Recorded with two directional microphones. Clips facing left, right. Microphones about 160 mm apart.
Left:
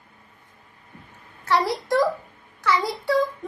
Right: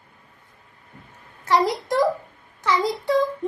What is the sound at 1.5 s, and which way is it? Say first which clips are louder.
A child's voice: right 1 dB; 20° right (ahead or behind).